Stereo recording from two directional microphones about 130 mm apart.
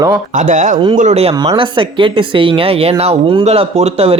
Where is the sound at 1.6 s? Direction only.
40° right (ahead or behind).